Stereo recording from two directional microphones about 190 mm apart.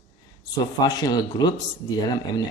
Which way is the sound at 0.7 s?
20° left (ahead or behind).